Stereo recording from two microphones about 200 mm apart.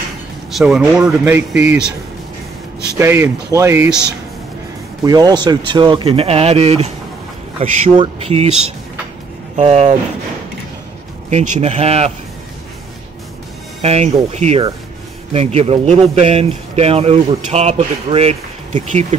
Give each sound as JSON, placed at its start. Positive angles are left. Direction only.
{"t": 0.5, "sound": "speech", "side_deg": 0}
{"t": 3.0, "sound": "speech", "side_deg": -15}
{"t": 5.0, "sound": "speech", "side_deg": -20}
{"t": 11.2, "sound": "speech", "side_deg": -35}
{"t": 13.7, "sound": "speech", "side_deg": -35}